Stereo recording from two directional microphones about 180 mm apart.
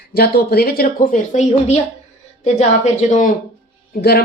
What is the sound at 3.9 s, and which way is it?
Speech, 60° left (ahead or behind).